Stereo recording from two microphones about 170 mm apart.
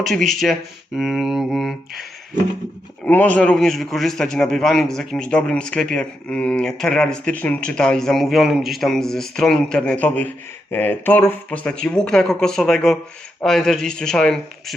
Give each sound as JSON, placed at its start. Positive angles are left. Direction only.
{"t": 0.4, "sound": "a man's voice", "side_deg": 5}
{"t": 3.0, "sound": "a man's voice", "side_deg": 10}